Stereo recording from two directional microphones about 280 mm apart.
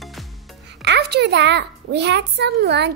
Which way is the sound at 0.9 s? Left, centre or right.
Right.